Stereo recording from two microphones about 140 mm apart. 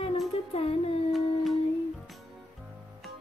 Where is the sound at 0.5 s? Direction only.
45° left (ahead or behind).